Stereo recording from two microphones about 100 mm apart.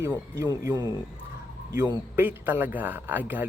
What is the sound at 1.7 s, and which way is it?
A man's voice, 30° right (ahead or behind).